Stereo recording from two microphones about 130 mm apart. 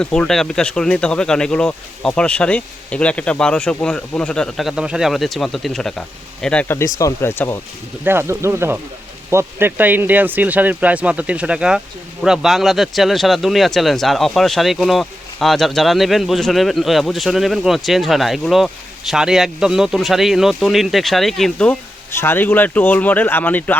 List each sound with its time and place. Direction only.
0.0 s speech: 5° left (ahead or behind)
6.7 s speech: 20° left (ahead or behind)
8.0 s speech: 15° right (ahead or behind); by 21.8 s 5° left (ahead or behind)
22.1 s speech: 15° left (ahead or behind)